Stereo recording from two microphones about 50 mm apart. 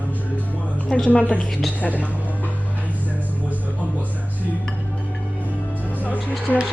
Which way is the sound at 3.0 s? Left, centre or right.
Left.